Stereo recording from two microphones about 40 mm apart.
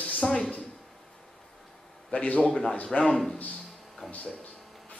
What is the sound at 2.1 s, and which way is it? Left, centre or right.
Speech, left.